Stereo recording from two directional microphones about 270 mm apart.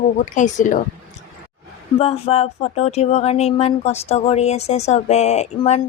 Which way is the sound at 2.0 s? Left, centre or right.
Left.